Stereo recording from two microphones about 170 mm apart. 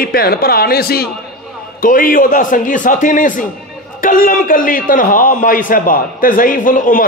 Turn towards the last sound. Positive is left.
turn(degrees=50)  # may be behind; listen again after turning